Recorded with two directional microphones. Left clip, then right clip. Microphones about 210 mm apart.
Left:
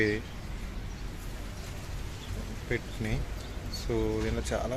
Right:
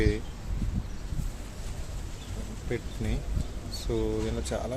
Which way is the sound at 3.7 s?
10° right (ahead or behind).